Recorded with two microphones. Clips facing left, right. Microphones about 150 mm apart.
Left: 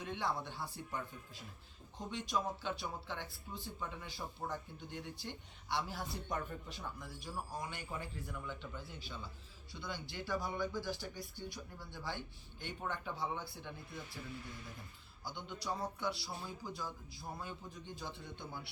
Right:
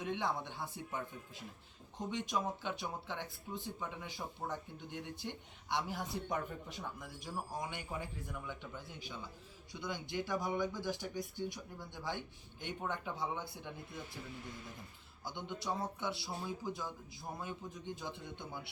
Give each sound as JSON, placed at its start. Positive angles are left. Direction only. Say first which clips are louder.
{"t": 0.0, "sound": "speech", "louder": "right 2 dB", "side_deg": -20}
{"t": 2.0, "sound": "speech", "louder": "right 1 dB", "side_deg": -15}
{"t": 15.2, "sound": "speech", "louder": "right 2 dB", "side_deg": -20}